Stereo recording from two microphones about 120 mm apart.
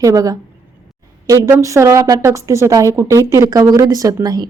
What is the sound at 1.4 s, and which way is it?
Speech, 20° right (ahead or behind).